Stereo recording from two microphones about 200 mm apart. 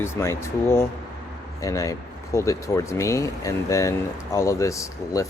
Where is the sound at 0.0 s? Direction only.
15° left (ahead or behind).